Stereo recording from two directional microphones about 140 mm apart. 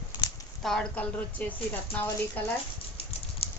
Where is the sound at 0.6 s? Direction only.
5° left (ahead or behind).